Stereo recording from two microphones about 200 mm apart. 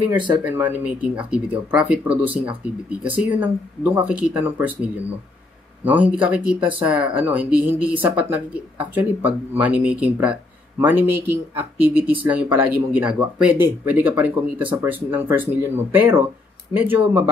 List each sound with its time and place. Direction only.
0.6 s speech: 5° right (ahead or behind)